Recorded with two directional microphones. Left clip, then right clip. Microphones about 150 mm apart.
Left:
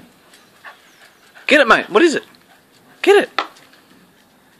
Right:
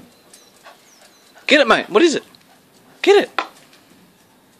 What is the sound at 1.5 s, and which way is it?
Speech, centre (ahead or behind).